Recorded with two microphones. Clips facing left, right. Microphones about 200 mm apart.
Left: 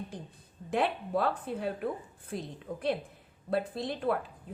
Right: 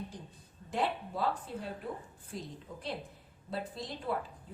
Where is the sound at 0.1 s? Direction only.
55° left (ahead or behind).